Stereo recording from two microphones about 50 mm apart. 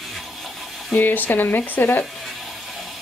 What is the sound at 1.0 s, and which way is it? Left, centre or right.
Speech, left.